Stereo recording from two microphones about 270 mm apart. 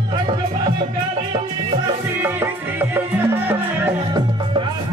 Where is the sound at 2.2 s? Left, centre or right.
Centre.